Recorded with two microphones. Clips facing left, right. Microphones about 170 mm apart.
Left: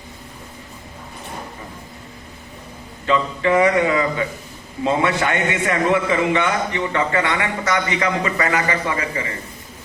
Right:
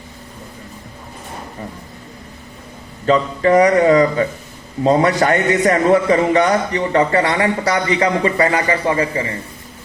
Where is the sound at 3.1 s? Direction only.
40° right (ahead or behind).